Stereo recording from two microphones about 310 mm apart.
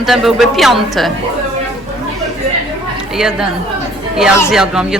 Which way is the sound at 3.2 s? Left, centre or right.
Centre.